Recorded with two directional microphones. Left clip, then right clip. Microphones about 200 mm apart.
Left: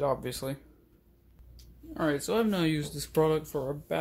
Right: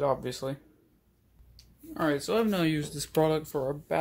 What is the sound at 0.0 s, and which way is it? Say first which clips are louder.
Speech: right 1 dB; 10° right (ahead or behind).